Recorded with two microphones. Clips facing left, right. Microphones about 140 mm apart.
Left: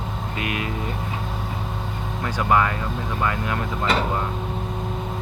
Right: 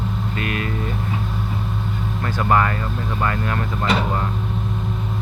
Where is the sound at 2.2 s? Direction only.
15° left (ahead or behind).